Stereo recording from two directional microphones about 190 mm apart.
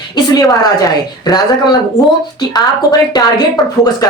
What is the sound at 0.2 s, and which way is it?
A woman's voice, 20° left (ahead or behind).